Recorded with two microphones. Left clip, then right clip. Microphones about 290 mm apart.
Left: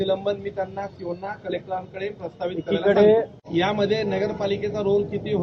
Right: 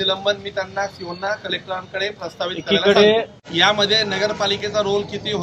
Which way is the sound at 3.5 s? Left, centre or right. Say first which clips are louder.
Right 6 dB; centre.